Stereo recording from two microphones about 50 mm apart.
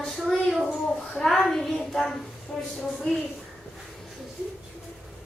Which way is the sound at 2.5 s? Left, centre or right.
Centre.